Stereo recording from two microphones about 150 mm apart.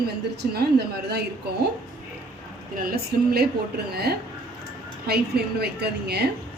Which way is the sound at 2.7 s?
70° right (ahead or behind).